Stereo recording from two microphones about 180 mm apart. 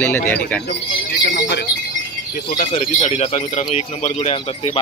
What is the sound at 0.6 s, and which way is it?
Speech, 65° left (ahead or behind).